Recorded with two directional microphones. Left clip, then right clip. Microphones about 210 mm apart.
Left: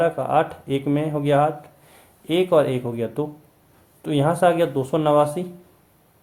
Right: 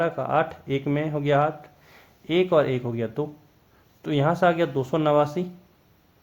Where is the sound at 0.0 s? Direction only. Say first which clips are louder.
Left 4 dB; 25° right (ahead or behind).